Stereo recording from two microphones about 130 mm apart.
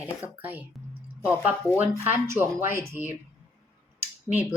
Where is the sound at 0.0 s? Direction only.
10° right (ahead or behind).